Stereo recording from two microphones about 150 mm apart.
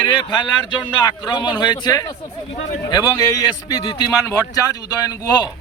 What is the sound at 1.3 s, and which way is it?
Speech, 30° left (ahead or behind).